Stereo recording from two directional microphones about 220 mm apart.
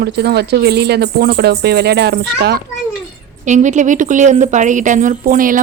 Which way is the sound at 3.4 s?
35° right (ahead or behind).